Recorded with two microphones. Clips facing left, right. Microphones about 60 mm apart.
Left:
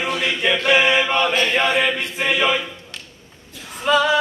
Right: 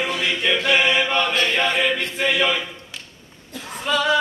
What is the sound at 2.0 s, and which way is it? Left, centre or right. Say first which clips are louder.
Chant: even; left.